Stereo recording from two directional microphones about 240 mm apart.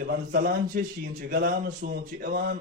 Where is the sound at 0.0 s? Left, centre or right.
Right.